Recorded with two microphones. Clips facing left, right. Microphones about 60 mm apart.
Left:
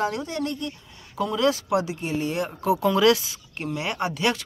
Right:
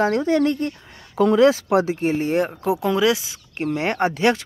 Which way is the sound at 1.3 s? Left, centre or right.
Right.